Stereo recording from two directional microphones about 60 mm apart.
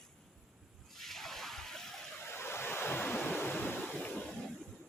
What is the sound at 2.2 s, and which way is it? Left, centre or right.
Waves, left.